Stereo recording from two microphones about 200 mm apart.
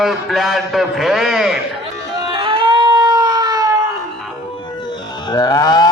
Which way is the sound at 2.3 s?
25° right (ahead or behind).